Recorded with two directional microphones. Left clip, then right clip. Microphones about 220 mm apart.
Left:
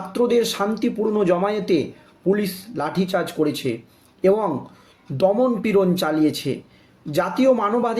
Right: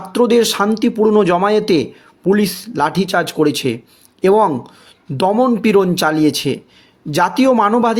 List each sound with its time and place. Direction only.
0.1 s speech: 45° right (ahead or behind)